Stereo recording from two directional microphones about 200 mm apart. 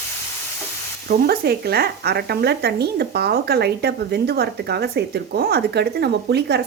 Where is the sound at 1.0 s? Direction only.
50° right (ahead or behind).